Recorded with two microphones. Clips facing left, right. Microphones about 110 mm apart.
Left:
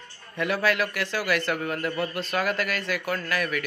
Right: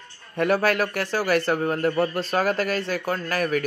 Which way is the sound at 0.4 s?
45° right (ahead or behind).